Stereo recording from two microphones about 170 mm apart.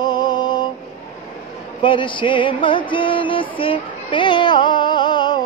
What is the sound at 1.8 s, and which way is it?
Music, 30° left (ahead or behind).